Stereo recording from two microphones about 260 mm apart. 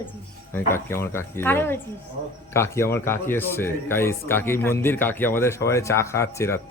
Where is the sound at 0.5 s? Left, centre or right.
Centre.